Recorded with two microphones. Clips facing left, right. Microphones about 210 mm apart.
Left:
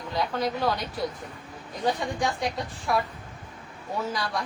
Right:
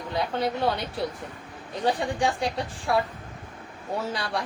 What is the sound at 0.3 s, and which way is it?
Speech, 30° right (ahead or behind).